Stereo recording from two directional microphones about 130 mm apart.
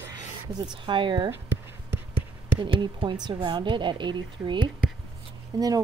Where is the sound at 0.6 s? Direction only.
35° right (ahead or behind).